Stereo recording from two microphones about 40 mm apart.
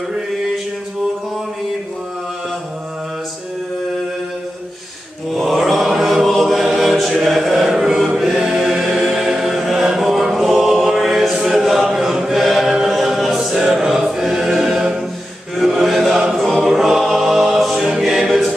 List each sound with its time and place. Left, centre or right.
5.3 s mantra: centre
6.2 s choir: centre
9.8 s chant: centre
10.3 s choir: centre
11.3 s a capella: centre
11.6 s choir: centre
16.6 s chant: centre
17.9 s music: centre